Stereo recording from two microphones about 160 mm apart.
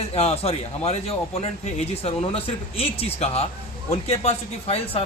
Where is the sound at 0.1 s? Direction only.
40° left (ahead or behind).